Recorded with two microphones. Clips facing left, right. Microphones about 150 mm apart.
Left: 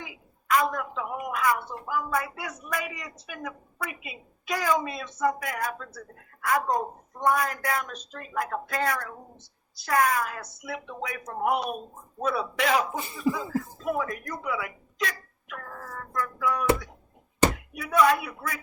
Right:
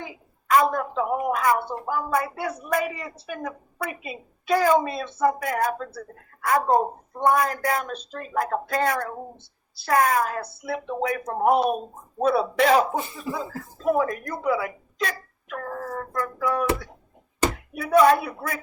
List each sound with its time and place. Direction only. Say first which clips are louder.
0.0 s a sound: right 5 dB; 35° right (ahead or behind)
1.5 s speech: right 4 dB; 35° right (ahead or behind)
17.7 s speech: right 5 dB; 35° right (ahead or behind)